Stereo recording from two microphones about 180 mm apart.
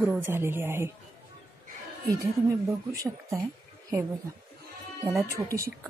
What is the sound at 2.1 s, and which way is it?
Speech, 20° right (ahead or behind).